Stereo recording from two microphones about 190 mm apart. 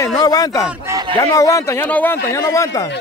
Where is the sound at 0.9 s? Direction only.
20° right (ahead or behind).